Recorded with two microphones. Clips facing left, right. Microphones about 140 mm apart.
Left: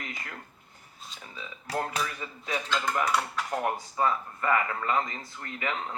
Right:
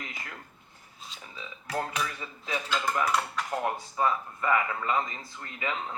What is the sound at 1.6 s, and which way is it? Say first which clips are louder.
Speech: left 1 dB; 35° left (ahead or behind).